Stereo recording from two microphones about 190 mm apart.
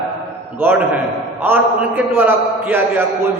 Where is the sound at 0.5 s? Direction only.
10° right (ahead or behind).